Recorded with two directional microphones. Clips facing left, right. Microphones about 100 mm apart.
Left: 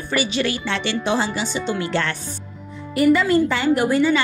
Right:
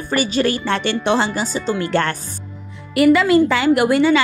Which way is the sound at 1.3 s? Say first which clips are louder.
Right 3 dB; 40° right (ahead or behind).